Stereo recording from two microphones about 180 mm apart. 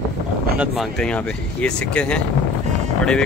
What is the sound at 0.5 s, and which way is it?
Speech, centre (ahead or behind).